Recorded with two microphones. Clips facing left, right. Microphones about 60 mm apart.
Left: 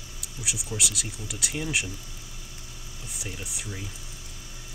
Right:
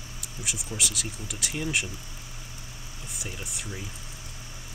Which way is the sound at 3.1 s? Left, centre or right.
Centre.